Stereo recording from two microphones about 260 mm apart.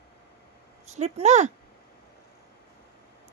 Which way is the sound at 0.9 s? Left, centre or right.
Right.